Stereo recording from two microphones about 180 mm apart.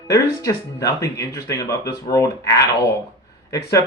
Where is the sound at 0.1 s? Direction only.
20° left (ahead or behind).